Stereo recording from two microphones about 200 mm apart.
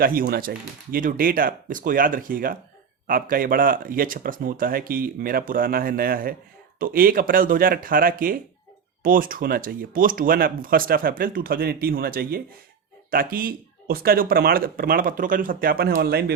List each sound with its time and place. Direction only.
0.0 s speech: 45° right (ahead or behind)